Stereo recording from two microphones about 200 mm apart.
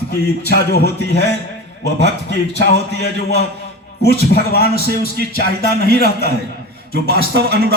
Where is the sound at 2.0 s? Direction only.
35° left (ahead or behind).